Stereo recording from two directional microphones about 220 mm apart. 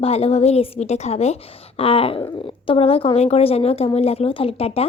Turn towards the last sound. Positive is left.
turn(degrees=25)  # may be behind; listen again after turning